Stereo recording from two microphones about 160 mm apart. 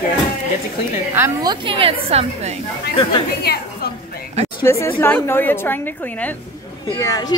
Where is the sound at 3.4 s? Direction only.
75° left (ahead or behind).